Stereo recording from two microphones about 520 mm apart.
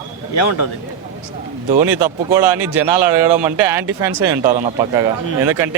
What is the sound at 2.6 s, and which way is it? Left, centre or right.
Speech, right.